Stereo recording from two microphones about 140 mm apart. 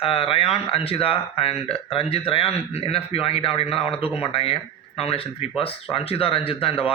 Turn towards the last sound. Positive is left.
turn(degrees=40)  # may be behind; listen again after turning